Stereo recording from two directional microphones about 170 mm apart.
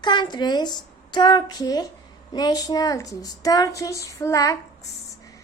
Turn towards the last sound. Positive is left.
turn(degrees=20)  # may be behind; listen again after turning